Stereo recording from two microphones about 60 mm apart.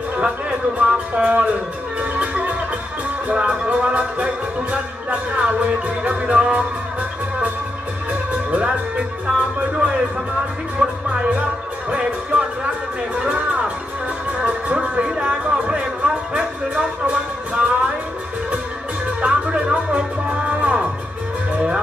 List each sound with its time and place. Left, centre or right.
0.7 s speech: right
2.0 s music: right
8.1 s music: centre
19.2 s music: centre